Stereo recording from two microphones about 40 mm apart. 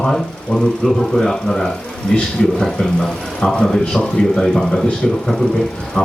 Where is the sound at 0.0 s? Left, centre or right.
Centre.